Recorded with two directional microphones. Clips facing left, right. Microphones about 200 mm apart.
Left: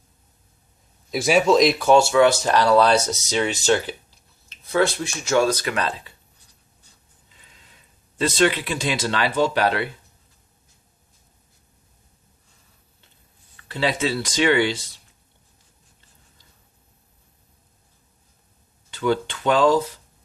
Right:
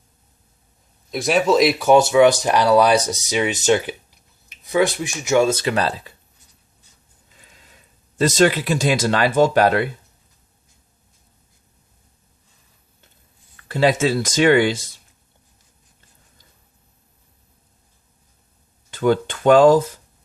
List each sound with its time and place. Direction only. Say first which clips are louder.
1.1 s speech: even; centre (ahead or behind)
1.9 s speech: right 3 dB; 20° right (ahead or behind); by 6.1 s 40° right (ahead or behind)
8.2 s speech: right 4 dB; 45° right (ahead or behind)
13.7 s speech: right 6 dB; 45° right (ahead or behind)
18.9 s speech: right 4 dB; 50° right (ahead or behind)